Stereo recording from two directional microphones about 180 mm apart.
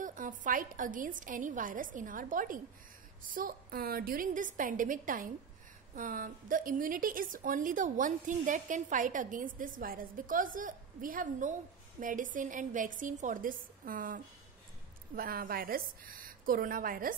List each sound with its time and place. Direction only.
0.0 s a woman's voice: 45° right (ahead or behind)